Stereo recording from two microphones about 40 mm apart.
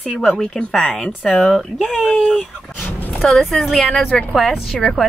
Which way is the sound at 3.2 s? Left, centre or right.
Centre.